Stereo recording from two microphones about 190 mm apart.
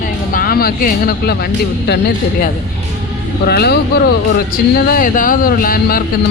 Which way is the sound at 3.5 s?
55° left (ahead or behind).